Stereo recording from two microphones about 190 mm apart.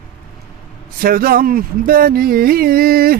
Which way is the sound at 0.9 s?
50° right (ahead or behind).